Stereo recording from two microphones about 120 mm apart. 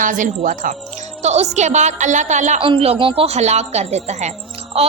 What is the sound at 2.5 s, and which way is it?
A woman's voice, 50° right (ahead or behind).